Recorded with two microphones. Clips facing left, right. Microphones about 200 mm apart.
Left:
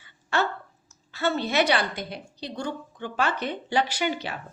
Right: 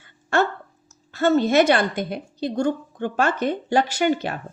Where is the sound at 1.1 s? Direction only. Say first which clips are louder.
Right 8 dB; 45° right (ahead or behind).